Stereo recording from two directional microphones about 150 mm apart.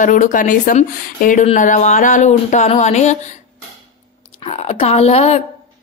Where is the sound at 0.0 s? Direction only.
60° left (ahead or behind).